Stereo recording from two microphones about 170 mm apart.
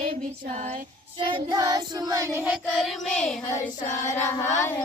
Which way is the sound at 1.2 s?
25° right (ahead or behind).